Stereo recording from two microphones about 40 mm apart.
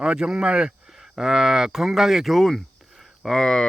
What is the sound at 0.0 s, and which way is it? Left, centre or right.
Speech, centre.